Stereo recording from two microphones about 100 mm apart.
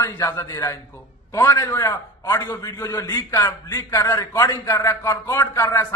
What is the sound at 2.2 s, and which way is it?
A man's voice, 45° left (ahead or behind).